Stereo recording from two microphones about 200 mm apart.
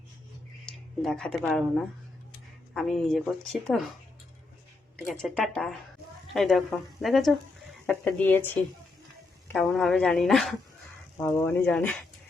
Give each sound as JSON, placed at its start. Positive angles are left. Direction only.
{"t": 0.6, "sound": "speech", "side_deg": 5}
{"t": 5.0, "sound": "speech", "side_deg": 0}
{"t": 9.5, "sound": "speech", "side_deg": 0}
{"t": 11.2, "sound": "speech", "side_deg": 15}